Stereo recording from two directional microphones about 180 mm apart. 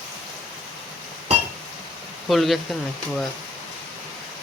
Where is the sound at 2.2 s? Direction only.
Centre (ahead or behind).